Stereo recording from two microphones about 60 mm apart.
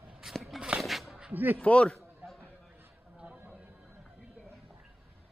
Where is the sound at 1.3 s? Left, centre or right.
Right.